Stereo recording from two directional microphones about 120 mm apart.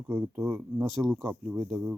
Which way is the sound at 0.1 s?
10° right (ahead or behind).